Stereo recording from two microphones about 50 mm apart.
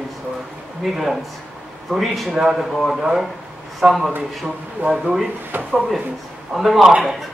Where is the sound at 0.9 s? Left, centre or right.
Centre.